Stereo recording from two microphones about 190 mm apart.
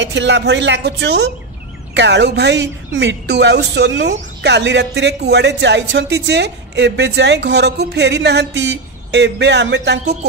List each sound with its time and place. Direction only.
0.0 s a woman's voice: 70° right (ahead or behind)